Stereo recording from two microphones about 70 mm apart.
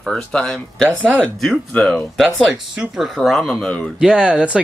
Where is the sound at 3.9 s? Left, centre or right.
Centre.